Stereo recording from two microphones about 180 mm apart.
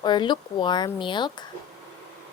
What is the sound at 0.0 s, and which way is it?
Speech, 25° left (ahead or behind).